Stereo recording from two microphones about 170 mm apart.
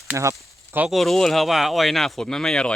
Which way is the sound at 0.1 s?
15° right (ahead or behind).